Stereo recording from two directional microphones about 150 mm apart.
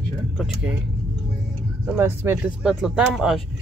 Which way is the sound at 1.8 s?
15° right (ahead or behind).